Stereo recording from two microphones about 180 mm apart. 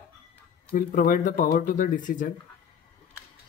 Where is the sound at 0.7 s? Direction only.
50° left (ahead or behind).